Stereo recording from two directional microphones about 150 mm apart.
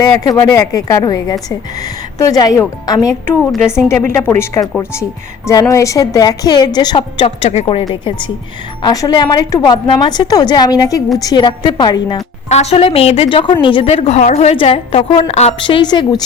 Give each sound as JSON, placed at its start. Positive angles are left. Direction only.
{"t": 0.0, "sound": "a woman's voice", "side_deg": 25}
{"t": 7.9, "sound": "a woman's voice", "side_deg": 30}
{"t": 12.5, "sound": "a woman's voice", "side_deg": 45}
{"t": 13.9, "sound": "a woman's voice", "side_deg": 50}